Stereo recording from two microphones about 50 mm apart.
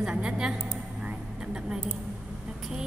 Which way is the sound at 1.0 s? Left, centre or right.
Centre.